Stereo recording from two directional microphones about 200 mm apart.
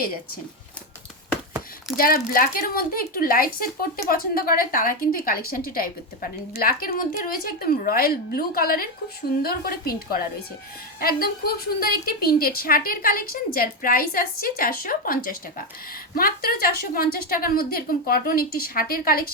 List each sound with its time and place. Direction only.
2.0 s a woman's voice: 45° left (ahead or behind)